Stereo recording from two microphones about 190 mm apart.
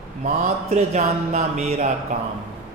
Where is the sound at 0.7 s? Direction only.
40° right (ahead or behind).